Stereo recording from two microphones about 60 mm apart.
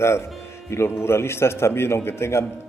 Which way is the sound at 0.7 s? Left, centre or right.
Left.